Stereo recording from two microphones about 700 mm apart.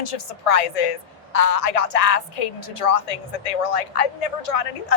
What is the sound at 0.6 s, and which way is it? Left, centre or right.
A woman's voice, left.